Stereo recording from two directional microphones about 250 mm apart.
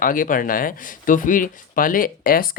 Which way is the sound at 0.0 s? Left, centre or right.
Left.